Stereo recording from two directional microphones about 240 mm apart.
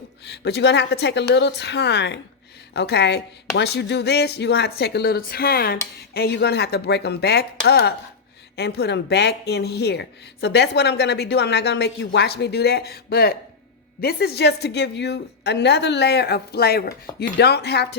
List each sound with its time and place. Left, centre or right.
0.3 s speech: left